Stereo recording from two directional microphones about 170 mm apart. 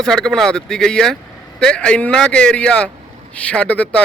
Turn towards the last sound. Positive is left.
turn(degrees=5)  # may be behind; listen again after turning